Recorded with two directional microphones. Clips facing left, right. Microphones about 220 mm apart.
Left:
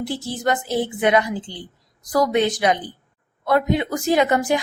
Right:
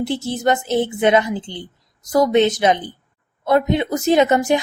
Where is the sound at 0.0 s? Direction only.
25° right (ahead or behind).